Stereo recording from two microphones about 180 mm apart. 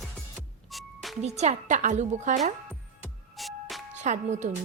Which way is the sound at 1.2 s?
40° right (ahead or behind).